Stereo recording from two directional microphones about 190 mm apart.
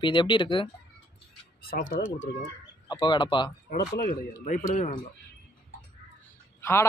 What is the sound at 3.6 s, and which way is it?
Speech, 50° left (ahead or behind).